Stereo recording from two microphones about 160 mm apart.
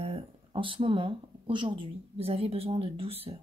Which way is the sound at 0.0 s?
35° right (ahead or behind).